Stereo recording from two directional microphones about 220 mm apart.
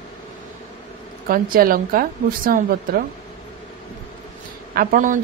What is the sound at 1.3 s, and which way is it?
A woman's voice, 40° right (ahead or behind).